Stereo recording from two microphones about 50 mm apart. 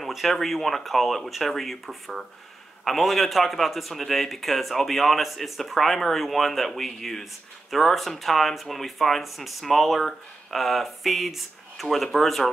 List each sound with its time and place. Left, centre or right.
0.0 s speech: centre